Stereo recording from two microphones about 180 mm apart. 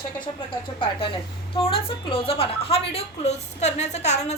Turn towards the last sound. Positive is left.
turn(degrees=40)  # may be behind; listen again after turning